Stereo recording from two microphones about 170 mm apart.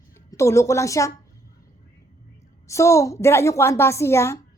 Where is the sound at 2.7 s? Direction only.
15° left (ahead or behind).